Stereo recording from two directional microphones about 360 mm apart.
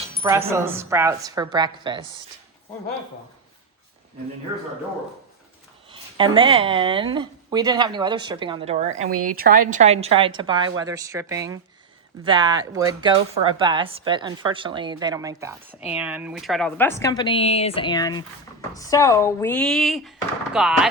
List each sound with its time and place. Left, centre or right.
0.2 s speech: centre
5.9 s a woman's voice: centre